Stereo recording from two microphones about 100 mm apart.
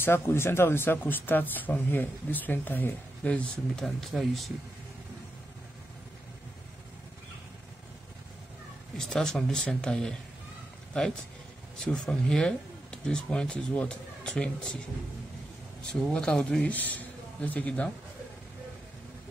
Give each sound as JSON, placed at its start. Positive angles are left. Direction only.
{"t": 0.0, "sound": "speech", "side_deg": 25}
{"t": 3.8, "sound": "speech", "side_deg": 0}
{"t": 8.9, "sound": "speech", "side_deg": 5}
{"t": 16.1, "sound": "speech", "side_deg": 10}